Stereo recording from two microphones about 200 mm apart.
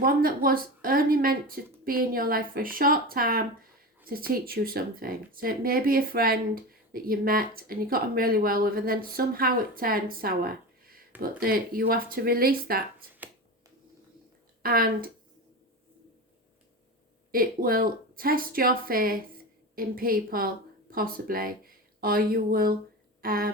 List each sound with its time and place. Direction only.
0.0 s speech: 45° right (ahead or behind)
14.6 s speech: 45° right (ahead or behind)
17.3 s speech: 45° right (ahead or behind)